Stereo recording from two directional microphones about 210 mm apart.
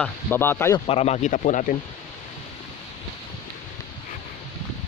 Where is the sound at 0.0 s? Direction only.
10° left (ahead or behind).